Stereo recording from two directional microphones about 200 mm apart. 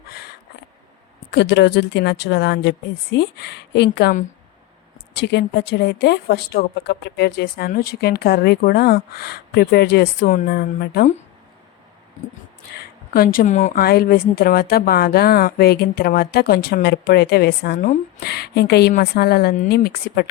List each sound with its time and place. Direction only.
0.1 s a sound: 50° left (ahead or behind)
1.3 s a woman's voice: 60° left (ahead or behind)
13.1 s a woman's voice: 45° left (ahead or behind)
13.8 s a woman's voice: 50° left (ahead or behind)